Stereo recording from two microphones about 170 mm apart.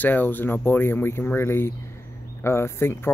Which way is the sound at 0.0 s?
10° left (ahead or behind).